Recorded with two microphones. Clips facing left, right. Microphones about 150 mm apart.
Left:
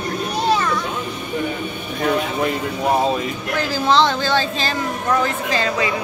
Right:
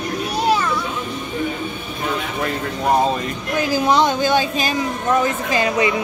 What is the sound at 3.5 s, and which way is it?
Speech, 15° right (ahead or behind).